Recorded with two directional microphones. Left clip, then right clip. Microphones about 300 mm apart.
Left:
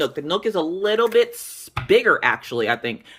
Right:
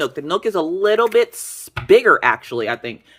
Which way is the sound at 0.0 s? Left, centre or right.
Centre.